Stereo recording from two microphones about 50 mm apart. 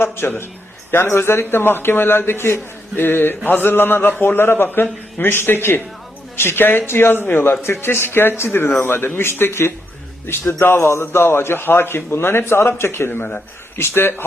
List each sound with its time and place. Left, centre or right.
0.0 s a man's voice: left